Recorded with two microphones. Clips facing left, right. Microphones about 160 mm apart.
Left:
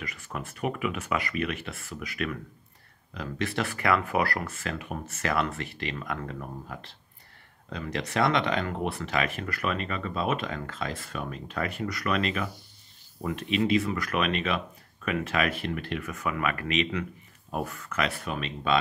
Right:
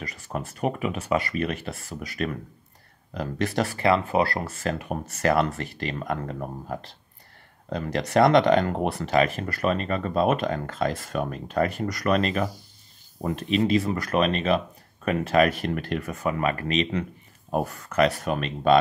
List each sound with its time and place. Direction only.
0.0 s speech: 40° right (ahead or behind)